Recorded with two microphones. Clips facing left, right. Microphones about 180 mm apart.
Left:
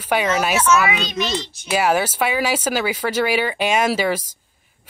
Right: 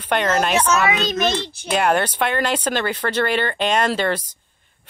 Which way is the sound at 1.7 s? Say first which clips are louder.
Even; 5° left (ahead or behind).